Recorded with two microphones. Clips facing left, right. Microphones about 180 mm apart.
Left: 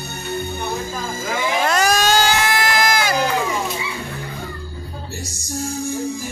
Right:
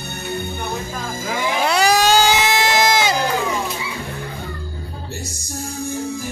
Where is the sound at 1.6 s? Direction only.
15° right (ahead or behind).